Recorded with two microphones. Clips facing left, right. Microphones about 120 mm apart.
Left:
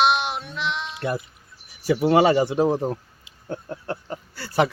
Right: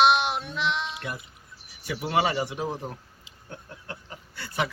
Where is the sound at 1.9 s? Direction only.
40° left (ahead or behind).